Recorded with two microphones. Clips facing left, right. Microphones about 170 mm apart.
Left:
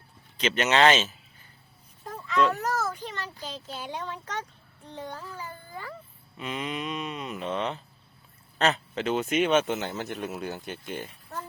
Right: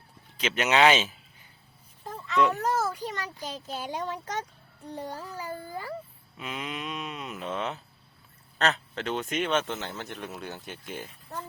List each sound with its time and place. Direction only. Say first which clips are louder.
0.3 s speech: left 1 dB; 5° right (ahead or behind)
2.1 s a sound: even; centre (ahead or behind)
2.6 s children playing: right 2 dB; 30° right (ahead or behind)
3.2 s a sound: right 1 dB; 10° right (ahead or behind)
3.8 s speech: right 3 dB; 40° right (ahead or behind)
4.9 s speech: right 2 dB; 10° right (ahead or behind)
5.1 s speech: right 3 dB; 35° right (ahead or behind)
6.3 s speech: left 3 dB; centre (ahead or behind)